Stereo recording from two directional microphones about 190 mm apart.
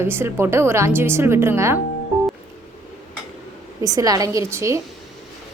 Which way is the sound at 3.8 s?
20° right (ahead or behind).